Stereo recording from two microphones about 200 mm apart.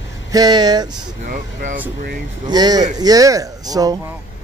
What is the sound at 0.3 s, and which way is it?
Speech, 20° right (ahead or behind).